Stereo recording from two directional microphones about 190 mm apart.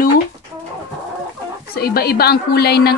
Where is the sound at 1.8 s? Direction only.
55° left (ahead or behind).